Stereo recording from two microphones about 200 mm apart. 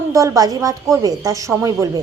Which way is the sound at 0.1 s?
15° right (ahead or behind).